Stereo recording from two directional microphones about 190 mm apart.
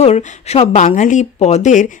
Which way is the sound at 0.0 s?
35° left (ahead or behind).